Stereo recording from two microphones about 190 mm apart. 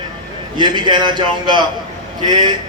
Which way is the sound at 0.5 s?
25° right (ahead or behind).